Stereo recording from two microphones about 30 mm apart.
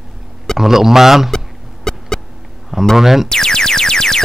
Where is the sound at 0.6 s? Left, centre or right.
Centre.